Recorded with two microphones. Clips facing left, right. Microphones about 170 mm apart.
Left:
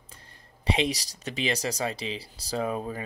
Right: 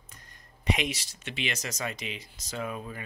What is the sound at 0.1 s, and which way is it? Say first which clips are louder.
Speech: left 2 dB; 30° left (ahead or behind).